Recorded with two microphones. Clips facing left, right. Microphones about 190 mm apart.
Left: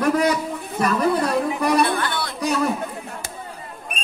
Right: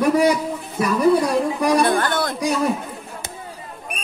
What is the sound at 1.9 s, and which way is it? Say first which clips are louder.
Speech: right 5 dB; 45° right (ahead or behind).